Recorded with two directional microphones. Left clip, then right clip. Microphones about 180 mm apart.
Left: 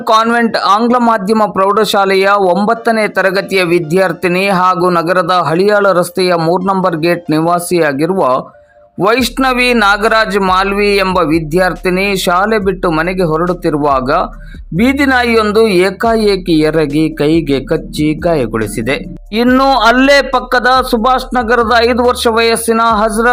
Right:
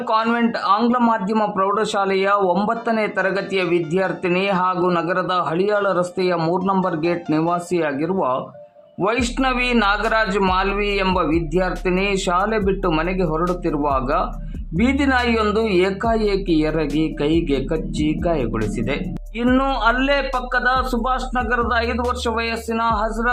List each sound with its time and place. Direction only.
0.3 s a man's voice: 35° left (ahead or behind)
0.8 s a man's voice: 25° left (ahead or behind)
19.5 s speech: 15° left (ahead or behind)
19.8 s a man's voice: 45° left (ahead or behind)